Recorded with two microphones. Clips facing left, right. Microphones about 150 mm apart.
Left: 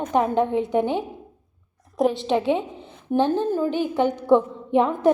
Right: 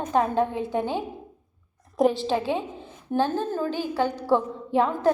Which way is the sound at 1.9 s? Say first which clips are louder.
Even; centre (ahead or behind).